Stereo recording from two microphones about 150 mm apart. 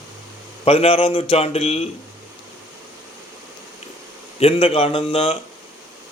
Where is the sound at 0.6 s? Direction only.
40° left (ahead or behind).